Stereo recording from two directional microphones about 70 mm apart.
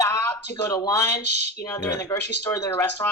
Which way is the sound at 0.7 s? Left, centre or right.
Left.